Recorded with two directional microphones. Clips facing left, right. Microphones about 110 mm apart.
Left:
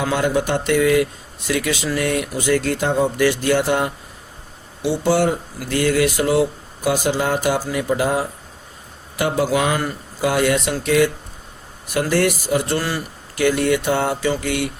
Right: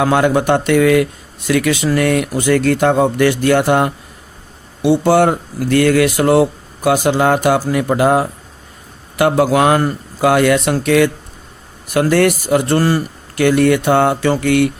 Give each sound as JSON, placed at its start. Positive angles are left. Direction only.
{"t": 0.0, "sound": "speech", "side_deg": -60}
{"t": 13.4, "sound": "speech", "side_deg": -60}